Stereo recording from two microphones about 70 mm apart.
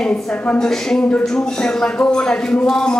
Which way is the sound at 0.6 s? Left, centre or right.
Centre.